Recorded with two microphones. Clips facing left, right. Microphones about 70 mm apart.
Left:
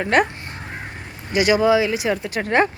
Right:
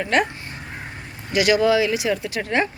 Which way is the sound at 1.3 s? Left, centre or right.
Left.